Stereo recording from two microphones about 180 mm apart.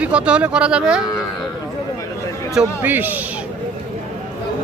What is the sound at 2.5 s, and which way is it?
Speech, 10° right (ahead or behind).